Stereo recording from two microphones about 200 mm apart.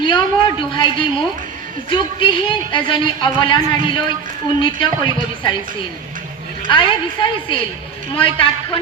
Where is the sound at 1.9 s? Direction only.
25° left (ahead or behind).